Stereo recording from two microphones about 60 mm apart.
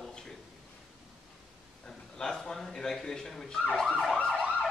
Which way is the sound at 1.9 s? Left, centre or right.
Centre.